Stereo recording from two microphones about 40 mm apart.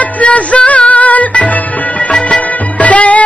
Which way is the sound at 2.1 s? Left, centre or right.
Left.